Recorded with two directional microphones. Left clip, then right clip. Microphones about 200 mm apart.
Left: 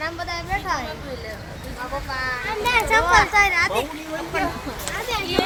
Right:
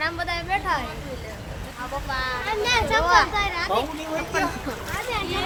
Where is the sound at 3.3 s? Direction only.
40° left (ahead or behind).